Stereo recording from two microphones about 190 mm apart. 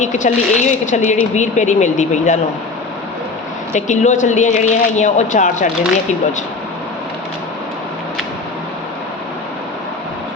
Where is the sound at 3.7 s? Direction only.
40° left (ahead or behind).